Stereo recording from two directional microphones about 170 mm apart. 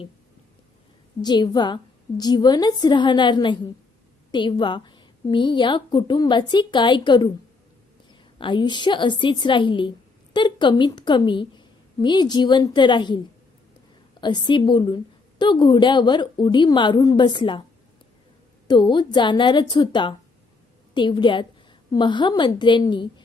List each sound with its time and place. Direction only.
1.2 s a woman's voice: 25° left (ahead or behind)
8.4 s a woman's voice: 30° left (ahead or behind)
18.7 s a woman's voice: 25° left (ahead or behind)